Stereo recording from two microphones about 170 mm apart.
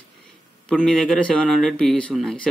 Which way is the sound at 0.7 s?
5° left (ahead or behind).